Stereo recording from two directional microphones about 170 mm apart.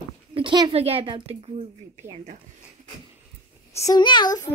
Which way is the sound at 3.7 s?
20° left (ahead or behind).